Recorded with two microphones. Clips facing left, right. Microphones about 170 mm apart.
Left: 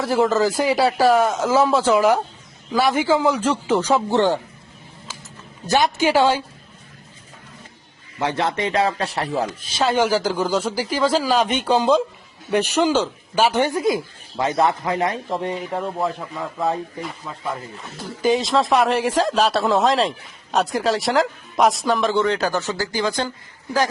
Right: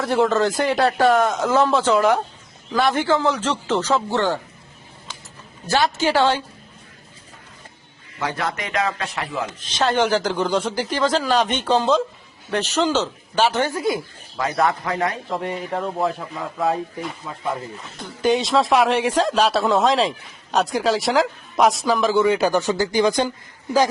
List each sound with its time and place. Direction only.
0.0 s a man's voice: centre (ahead or behind); by 4.4 s 20° left (ahead or behind)
5.6 s a man's voice: 15° left (ahead or behind)
8.2 s a man's voice: 25° left (ahead or behind)
9.6 s a man's voice: 5° left (ahead or behind); by 15.5 s 25° left (ahead or behind)
15.5 s speech: centre (ahead or behind); by 23.3 s 15° right (ahead or behind)